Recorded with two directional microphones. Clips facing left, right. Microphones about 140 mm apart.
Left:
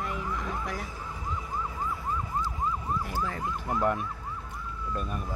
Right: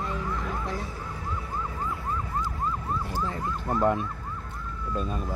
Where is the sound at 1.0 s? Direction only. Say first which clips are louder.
Right 1 dB; 15° left (ahead or behind).